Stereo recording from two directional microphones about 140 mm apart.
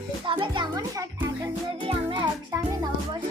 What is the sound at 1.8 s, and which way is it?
Music, 35° right (ahead or behind).